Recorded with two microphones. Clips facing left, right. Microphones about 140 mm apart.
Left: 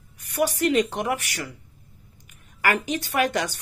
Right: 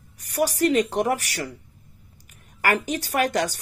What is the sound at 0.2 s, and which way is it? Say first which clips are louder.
Speech: right 1 dB; 40° right (ahead or behind).